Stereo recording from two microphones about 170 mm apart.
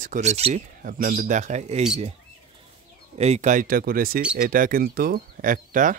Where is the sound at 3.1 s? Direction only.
40° right (ahead or behind).